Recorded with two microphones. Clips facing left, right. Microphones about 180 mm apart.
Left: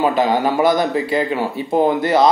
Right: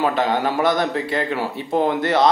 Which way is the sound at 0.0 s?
5° left (ahead or behind).